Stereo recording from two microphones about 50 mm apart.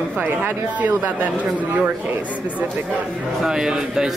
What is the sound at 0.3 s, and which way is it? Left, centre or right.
Speech, right.